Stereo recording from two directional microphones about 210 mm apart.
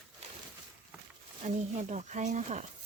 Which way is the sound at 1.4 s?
35° right (ahead or behind).